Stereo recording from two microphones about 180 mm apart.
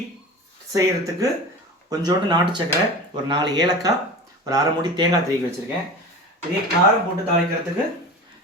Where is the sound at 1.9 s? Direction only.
20° right (ahead or behind).